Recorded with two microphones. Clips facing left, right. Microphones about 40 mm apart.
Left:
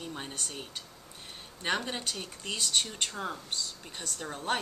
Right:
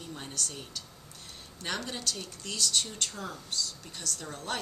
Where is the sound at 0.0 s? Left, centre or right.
Left.